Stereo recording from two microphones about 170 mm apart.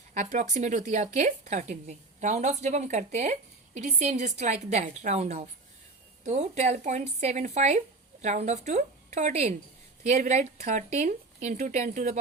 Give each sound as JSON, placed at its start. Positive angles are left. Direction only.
{"t": 0.1, "sound": "a woman's voice", "side_deg": -45}